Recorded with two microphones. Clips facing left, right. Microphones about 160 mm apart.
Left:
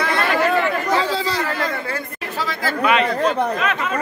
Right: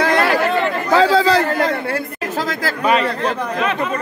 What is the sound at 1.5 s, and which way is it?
Chatter, 55° right (ahead or behind).